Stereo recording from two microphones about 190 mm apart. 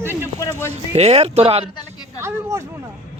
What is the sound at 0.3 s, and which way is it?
Speech, 15° left (ahead or behind).